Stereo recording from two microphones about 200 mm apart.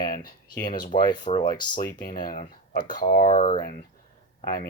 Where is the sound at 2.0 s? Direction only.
45° left (ahead or behind).